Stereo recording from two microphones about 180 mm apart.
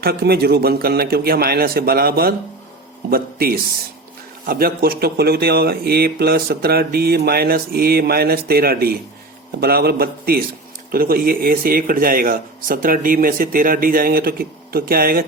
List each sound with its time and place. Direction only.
0.0 s speech: 60° right (ahead or behind)